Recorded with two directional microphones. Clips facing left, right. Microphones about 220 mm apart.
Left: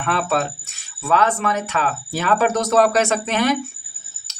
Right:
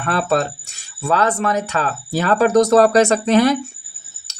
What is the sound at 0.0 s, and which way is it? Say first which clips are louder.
Speech: right 3 dB; 35° right (ahead or behind).